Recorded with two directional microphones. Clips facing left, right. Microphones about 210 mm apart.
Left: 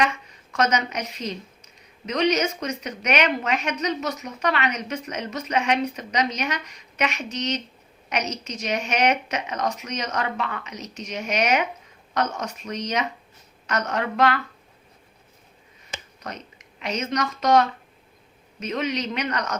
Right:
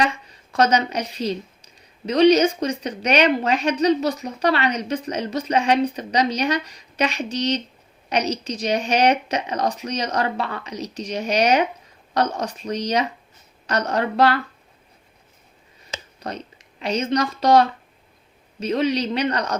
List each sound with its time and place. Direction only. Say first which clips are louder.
0.0 s a woman's voice: right 2 dB; 35° right (ahead or behind)
16.2 s a woman's voice: right 6 dB; 30° right (ahead or behind)